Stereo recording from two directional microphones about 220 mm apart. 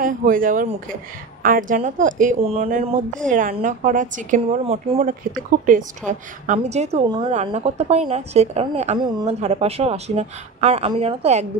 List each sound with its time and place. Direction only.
0.0 s a woman's voice: 40° right (ahead or behind)